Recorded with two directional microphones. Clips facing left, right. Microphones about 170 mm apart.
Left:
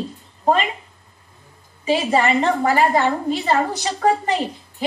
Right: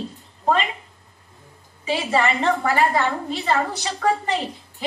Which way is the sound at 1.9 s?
40° left (ahead or behind).